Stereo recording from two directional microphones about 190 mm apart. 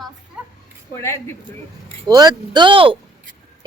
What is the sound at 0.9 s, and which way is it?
Speech, 15° left (ahead or behind).